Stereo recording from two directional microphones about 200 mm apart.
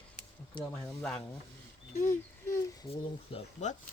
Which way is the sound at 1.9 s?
40° left (ahead or behind).